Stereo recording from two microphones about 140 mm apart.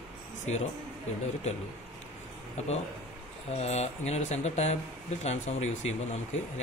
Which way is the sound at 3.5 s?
50° left (ahead or behind).